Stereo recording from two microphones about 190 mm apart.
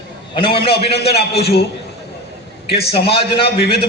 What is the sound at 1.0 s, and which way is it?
Speech, 60° left (ahead or behind).